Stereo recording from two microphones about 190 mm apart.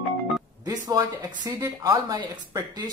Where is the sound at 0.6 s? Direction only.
20° right (ahead or behind).